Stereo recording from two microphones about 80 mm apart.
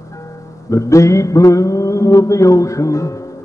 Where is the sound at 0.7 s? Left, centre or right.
Left.